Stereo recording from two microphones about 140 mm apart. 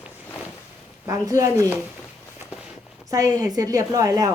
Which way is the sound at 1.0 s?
25° right (ahead or behind).